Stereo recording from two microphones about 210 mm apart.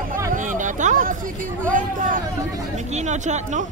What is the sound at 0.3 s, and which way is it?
Music, 35° right (ahead or behind).